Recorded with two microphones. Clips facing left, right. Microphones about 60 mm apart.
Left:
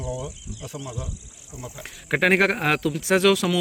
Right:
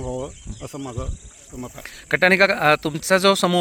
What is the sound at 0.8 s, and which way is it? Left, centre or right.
Speech, right.